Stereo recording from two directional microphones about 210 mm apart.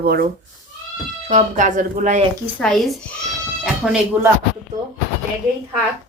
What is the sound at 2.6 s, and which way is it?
A woman's voice, centre (ahead or behind).